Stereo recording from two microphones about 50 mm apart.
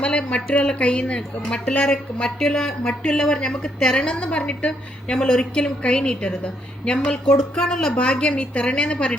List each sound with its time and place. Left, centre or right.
0.0 s a sound: left
0.4 s a woman's voice: left
2.8 s a woman's voice: left